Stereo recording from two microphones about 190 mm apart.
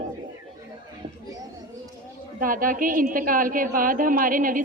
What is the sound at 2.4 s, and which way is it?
A man's voice, 45° right (ahead or behind).